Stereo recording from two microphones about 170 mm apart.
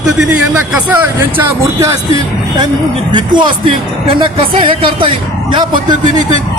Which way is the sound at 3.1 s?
25° right (ahead or behind).